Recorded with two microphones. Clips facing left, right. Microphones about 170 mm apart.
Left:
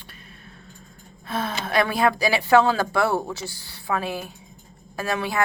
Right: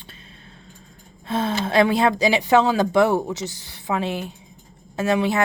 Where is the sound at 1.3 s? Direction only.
25° right (ahead or behind).